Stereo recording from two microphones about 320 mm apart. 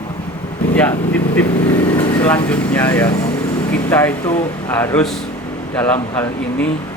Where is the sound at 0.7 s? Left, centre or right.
Centre.